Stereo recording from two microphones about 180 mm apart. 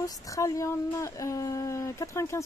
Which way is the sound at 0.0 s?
20° left (ahead or behind).